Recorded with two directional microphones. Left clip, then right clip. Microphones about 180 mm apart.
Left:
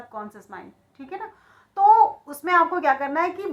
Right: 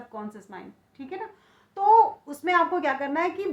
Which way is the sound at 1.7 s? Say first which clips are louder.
Left 3 dB; 35° right (ahead or behind).